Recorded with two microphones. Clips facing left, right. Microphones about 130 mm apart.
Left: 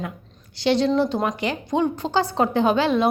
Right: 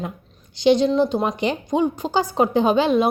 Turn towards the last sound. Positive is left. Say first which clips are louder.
# right 2 dB
turn(degrees=-15)  # may be behind; listen again after turning